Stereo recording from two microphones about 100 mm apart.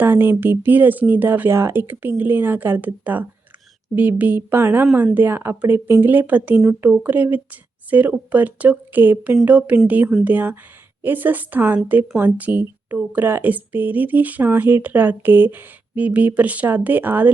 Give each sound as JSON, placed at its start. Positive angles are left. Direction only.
{"t": 0.0, "sound": "speech", "side_deg": -20}